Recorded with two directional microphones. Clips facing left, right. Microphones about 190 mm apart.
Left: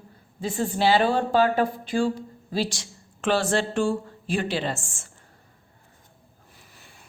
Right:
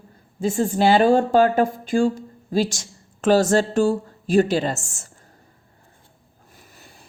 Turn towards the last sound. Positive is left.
turn(degrees=-40)  # may be behind; listen again after turning